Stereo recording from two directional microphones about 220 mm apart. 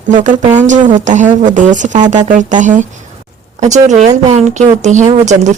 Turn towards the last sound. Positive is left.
turn(degrees=-35)  # may be behind; listen again after turning